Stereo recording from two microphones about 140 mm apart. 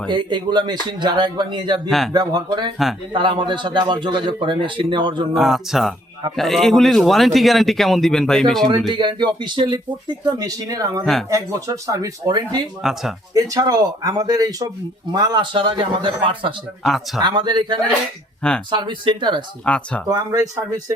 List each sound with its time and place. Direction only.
0.1 s a man's voice: 35° right (ahead or behind)
5.3 s speech: centre (ahead or behind)
8.9 s a man's voice: 35° right (ahead or behind)
11.0 s speech: centre (ahead or behind)
11.3 s speech: 25° right (ahead or behind)
12.8 s speech: centre (ahead or behind)
13.3 s a man's voice: 25° right (ahead or behind)
19.6 s speech: 10° left (ahead or behind)
20.1 s speech: 25° right (ahead or behind)